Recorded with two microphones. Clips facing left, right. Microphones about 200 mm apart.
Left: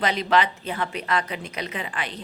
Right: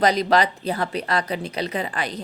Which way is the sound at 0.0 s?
40° right (ahead or behind).